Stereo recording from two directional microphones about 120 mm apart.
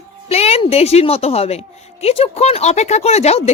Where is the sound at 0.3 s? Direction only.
60° left (ahead or behind).